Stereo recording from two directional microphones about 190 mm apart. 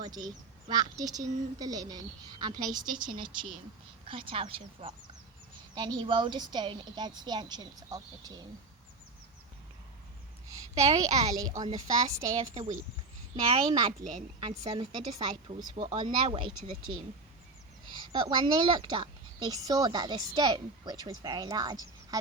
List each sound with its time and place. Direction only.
0.0 s a woman's voice: 20° right (ahead or behind)
10.8 s a child's voice: 35° right (ahead or behind)
11.6 s a woman's voice: 15° right (ahead or behind)
12.5 s a child's voice: 40° right (ahead or behind)
13.5 s a woman's voice: 25° right (ahead or behind)